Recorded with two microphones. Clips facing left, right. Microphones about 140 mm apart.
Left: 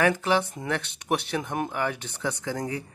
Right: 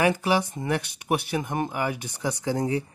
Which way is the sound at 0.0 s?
10° right (ahead or behind).